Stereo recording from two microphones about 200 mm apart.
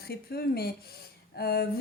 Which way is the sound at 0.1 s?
50° left (ahead or behind).